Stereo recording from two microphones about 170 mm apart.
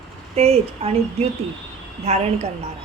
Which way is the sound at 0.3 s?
35° right (ahead or behind).